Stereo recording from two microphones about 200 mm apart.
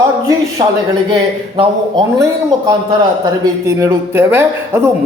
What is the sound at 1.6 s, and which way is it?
A man's voice, 20° right (ahead or behind).